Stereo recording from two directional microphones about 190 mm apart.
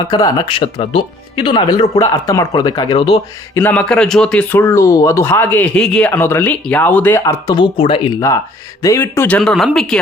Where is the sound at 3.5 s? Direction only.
10° left (ahead or behind); by 8.2 s 25° left (ahead or behind).